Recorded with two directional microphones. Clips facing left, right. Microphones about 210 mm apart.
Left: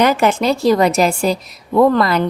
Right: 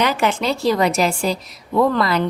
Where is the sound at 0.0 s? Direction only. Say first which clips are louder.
Left 5 dB; 45° left (ahead or behind).